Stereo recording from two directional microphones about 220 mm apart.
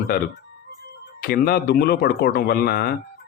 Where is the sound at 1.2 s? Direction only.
45° left (ahead or behind).